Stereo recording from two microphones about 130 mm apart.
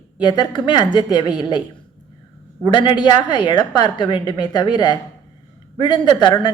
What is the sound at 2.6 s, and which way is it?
A woman's voice, 35° left (ahead or behind).